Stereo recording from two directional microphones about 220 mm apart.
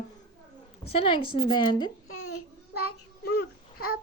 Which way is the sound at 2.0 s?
80° left.